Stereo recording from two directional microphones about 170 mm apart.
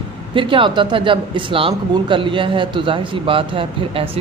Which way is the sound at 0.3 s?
30° right (ahead or behind).